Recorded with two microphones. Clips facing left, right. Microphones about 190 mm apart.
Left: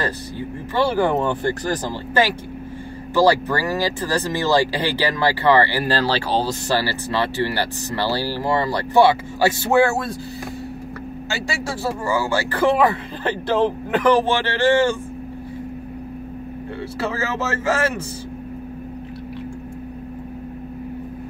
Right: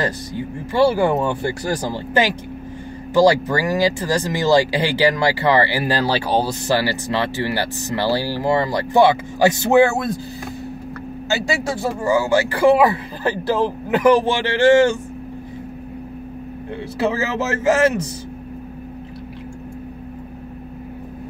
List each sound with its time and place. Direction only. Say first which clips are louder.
0.0 s speech: right 2 dB; 15° right (ahead or behind)
12.0 s speech: right 6 dB; 15° right (ahead or behind)
17.0 s speech: right 4 dB; 15° right (ahead or behind)